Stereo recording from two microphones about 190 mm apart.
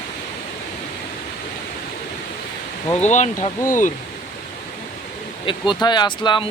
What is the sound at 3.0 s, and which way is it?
Speech, 40° left (ahead or behind).